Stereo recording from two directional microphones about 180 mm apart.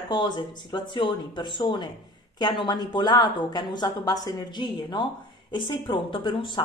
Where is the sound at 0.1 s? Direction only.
25° left (ahead or behind).